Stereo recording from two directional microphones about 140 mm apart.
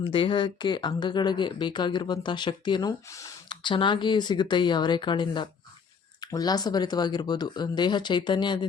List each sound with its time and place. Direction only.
0.0 s speech: 40° left (ahead or behind)
3.1 s speech: 20° left (ahead or behind)
3.5 s speech: 35° left (ahead or behind)